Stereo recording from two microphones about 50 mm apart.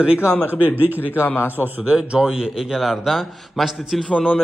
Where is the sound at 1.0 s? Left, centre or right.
Left.